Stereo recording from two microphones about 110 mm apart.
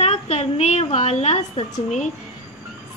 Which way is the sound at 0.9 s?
75° left (ahead or behind).